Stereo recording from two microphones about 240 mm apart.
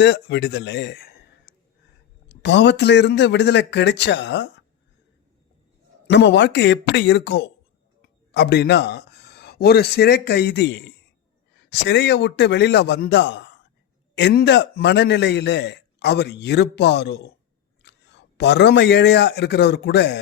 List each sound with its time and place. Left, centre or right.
0.0 s a man's voice: left
6.1 s a man's voice: left